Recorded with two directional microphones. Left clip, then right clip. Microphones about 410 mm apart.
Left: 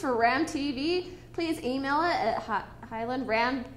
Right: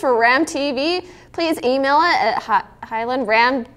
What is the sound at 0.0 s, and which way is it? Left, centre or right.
A woman's voice, right.